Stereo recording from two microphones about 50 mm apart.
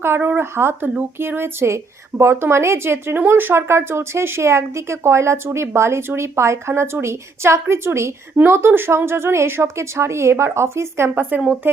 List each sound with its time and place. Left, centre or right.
0.3 s a woman's voice: right
11.1 s a woman's voice: right